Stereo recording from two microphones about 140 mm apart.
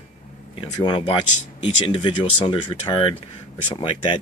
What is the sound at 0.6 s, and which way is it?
Speech, 40° left (ahead or behind).